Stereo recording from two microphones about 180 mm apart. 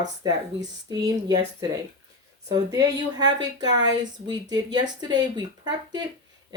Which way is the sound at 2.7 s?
20° right (ahead or behind).